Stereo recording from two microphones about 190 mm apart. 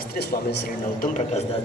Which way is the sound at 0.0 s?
55° left (ahead or behind).